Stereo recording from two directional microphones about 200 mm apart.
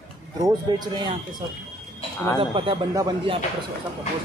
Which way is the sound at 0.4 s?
20° right (ahead or behind).